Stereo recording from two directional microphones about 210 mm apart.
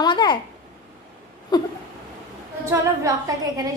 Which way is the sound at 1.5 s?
20° left (ahead or behind).